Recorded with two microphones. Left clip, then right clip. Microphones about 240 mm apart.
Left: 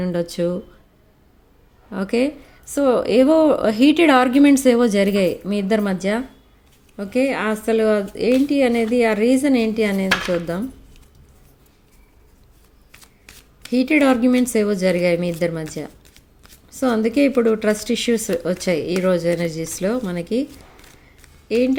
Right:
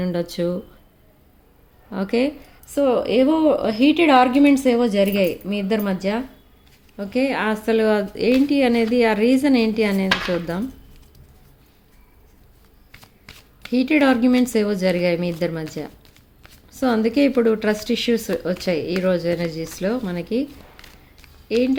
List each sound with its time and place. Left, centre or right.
0.0 s a woman's voice: centre
1.9 s a woman's voice: centre
13.2 s speech: centre
16.7 s a woman's voice: centre